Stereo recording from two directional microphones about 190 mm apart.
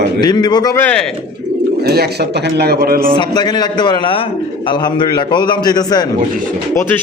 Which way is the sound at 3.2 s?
20° left (ahead or behind).